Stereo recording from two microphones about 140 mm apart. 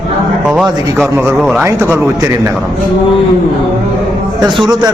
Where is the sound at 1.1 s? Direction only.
15° right (ahead or behind).